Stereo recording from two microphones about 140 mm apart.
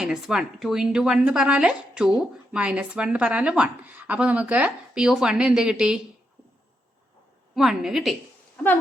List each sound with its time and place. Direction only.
0.0 s a woman's voice: 5° right (ahead or behind)
7.5 s a woman's voice: centre (ahead or behind)